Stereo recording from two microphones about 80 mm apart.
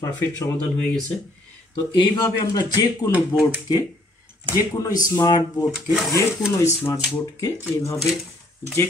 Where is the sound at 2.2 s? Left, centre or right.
Left.